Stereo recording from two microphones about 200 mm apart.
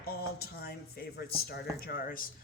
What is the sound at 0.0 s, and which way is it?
Speech, 50° left (ahead or behind).